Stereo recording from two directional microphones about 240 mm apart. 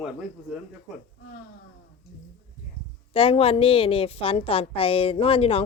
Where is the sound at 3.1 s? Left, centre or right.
Left.